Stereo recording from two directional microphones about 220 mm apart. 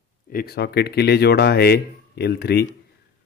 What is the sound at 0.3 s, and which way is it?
Speech, 45° left (ahead or behind).